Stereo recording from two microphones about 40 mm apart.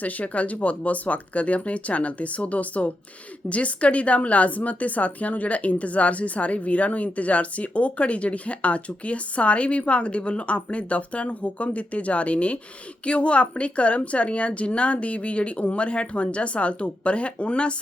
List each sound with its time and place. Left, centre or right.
0.0 s speech: left